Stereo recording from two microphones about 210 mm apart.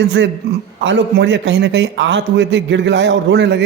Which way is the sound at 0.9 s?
60° right (ahead or behind).